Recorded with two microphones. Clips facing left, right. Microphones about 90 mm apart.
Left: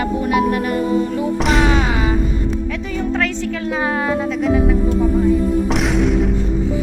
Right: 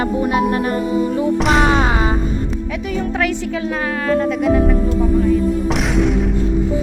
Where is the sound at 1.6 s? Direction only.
40° right (ahead or behind).